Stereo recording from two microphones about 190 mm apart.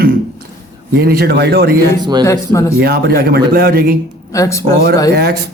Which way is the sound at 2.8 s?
55° right (ahead or behind).